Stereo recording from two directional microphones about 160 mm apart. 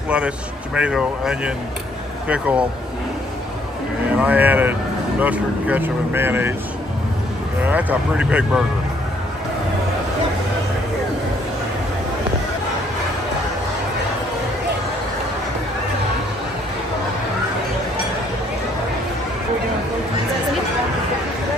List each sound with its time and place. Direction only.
0.7 s speech: 5° right (ahead or behind)
4.1 s speech: 10° right (ahead or behind)
7.6 s speech: 10° right (ahead or behind)